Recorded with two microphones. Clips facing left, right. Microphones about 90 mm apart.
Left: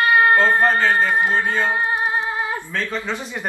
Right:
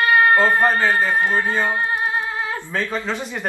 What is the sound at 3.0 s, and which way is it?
Speech, centre (ahead or behind).